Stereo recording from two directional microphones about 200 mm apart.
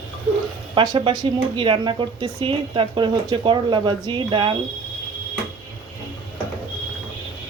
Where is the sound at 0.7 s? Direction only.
25° right (ahead or behind).